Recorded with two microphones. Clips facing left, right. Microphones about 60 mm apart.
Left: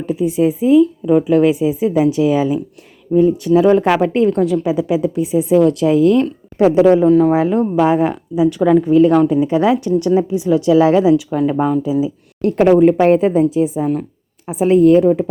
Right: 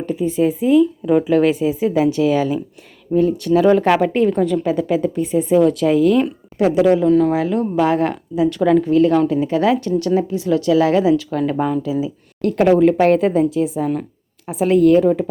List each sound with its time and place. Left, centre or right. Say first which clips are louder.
0.0 s a woman's voice: left 2 dB; centre
5.5 s speech: left 2 dB; centre
6.6 s speech: left 4 dB; left
7.1 s a woman's voice: left 3 dB; centre
7.8 s a woman's voice: left 2 dB; centre